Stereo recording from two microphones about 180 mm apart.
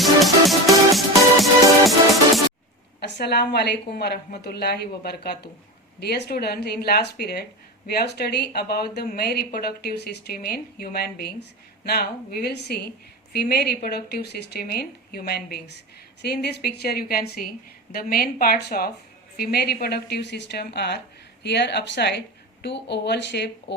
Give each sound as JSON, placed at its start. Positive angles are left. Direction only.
{"t": 0.0, "sound": "music", "side_deg": 0}
{"t": 3.0, "sound": "speech", "side_deg": 65}